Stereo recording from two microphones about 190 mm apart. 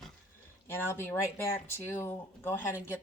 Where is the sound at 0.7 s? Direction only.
10° left (ahead or behind).